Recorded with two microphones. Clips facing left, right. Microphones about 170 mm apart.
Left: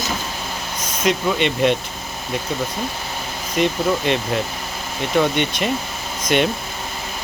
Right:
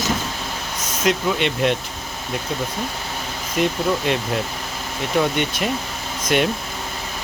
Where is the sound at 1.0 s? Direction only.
Centre (ahead or behind).